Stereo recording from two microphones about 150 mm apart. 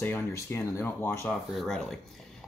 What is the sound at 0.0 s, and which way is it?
Speech, 15° left (ahead or behind).